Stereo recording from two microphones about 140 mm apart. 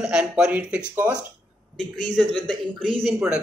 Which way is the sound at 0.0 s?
5° right (ahead or behind).